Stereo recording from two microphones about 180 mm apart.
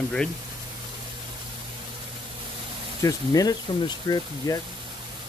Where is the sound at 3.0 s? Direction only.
20° left (ahead or behind).